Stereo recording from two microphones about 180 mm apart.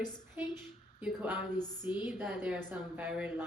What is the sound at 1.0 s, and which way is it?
A woman's voice, 10° right (ahead or behind).